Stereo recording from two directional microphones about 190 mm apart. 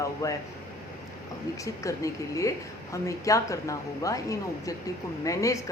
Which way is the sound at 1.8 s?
15° left (ahead or behind).